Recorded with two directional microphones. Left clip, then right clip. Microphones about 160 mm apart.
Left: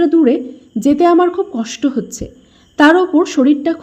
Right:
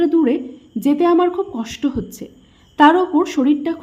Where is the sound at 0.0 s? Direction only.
15° left (ahead or behind).